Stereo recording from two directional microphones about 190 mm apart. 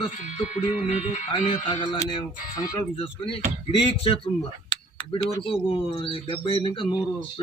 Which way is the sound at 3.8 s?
25° left (ahead or behind).